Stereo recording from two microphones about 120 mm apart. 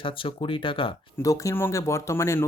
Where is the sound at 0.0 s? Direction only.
45° left (ahead or behind).